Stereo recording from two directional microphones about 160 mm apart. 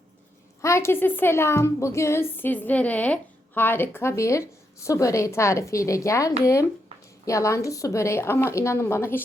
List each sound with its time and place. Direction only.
0.6 s a woman's voice: 15° left (ahead or behind)